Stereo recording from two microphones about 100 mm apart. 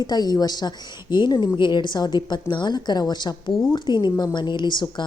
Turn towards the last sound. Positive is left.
turn(degrees=50)  # may be behind; listen again after turning